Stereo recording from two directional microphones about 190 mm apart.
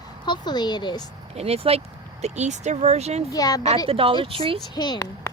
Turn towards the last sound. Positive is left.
turn(degrees=20)  # may be behind; listen again after turning